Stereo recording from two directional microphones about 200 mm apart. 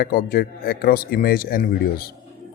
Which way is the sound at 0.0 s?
50° left (ahead or behind).